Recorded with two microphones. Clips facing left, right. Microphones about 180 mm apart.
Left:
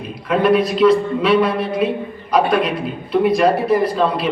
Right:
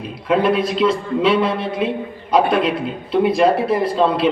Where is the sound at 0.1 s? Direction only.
25° right (ahead or behind).